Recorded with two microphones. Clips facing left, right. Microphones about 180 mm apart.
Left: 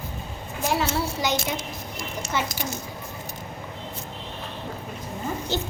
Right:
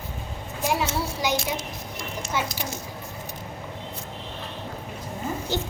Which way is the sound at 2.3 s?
10° right (ahead or behind).